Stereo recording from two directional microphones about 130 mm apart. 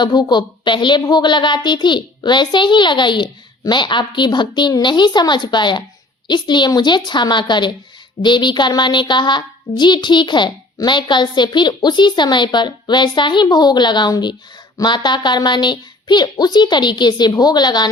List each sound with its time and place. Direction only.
0.0 s speech: 35° left (ahead or behind)